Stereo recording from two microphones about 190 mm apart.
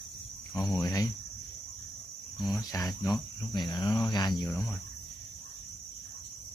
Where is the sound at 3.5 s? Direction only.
25° left (ahead or behind).